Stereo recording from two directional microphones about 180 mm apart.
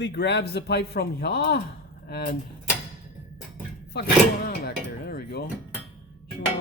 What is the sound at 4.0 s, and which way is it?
Speech, 65° left (ahead or behind).